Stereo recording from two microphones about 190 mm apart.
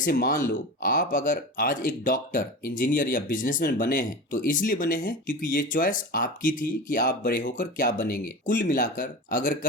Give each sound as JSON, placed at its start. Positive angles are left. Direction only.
{"t": 0.0, "sound": "speech", "side_deg": 50}